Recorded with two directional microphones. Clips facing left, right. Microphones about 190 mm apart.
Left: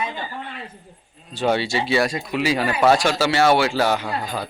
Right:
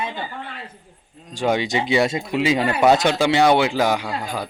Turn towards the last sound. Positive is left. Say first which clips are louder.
# even
turn(degrees=-10)  # may be behind; listen again after turning